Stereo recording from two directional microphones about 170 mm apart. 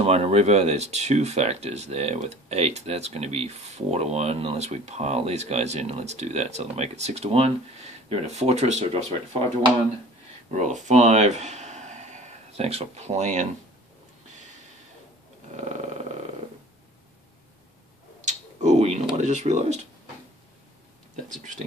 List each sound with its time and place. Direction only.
0.0 s speech: 35° right (ahead or behind)
10.5 s speech: 45° right (ahead or behind)
15.5 s a sound: 45° right (ahead or behind)
18.2 s tick-tock: 45° right (ahead or behind)
19.1 s speech: 45° right (ahead or behind)